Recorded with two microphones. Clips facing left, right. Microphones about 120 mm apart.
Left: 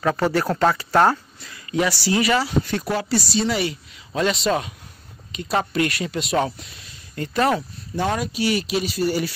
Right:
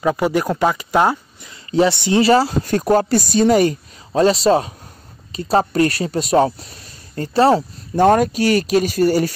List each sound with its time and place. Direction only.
0.0 s speech: 15° right (ahead or behind)
1.5 s speech: 25° right (ahead or behind)
7.9 s speech: 50° right (ahead or behind)